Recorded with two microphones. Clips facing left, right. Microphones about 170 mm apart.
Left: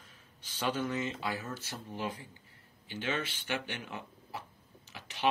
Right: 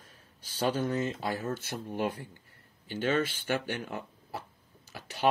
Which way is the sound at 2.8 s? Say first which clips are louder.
Right 7 dB; 45° right (ahead or behind).